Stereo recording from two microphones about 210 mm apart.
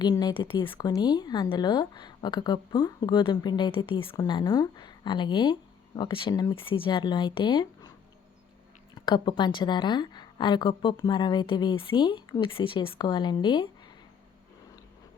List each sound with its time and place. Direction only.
0.0 s speech: 20° left (ahead or behind)
9.0 s speech: 20° left (ahead or behind)